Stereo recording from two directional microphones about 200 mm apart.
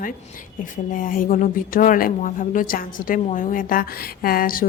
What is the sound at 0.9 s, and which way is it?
Speech, 45° left (ahead or behind).